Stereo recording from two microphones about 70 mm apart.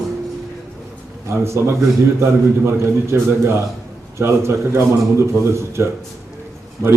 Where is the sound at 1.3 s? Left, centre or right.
Right.